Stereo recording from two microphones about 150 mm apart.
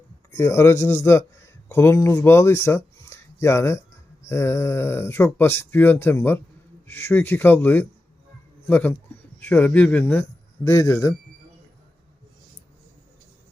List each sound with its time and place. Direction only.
0.3 s speech: 20° left (ahead or behind)